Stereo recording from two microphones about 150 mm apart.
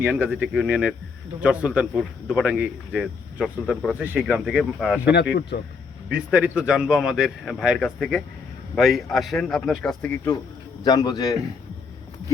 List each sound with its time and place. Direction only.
0.0 s speech: 10° right (ahead or behind)
4.0 s speech: 10° right (ahead or behind)
5.5 s speech: 75° left (ahead or behind)
6.1 s speech: 5° right (ahead or behind)
10.8 s a man's voice: 25° left (ahead or behind)